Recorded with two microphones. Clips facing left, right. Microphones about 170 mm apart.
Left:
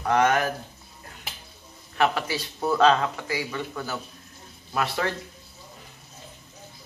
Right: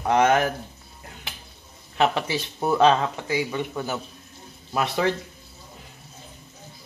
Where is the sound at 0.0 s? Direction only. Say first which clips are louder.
Right 2 dB; 20° right (ahead or behind).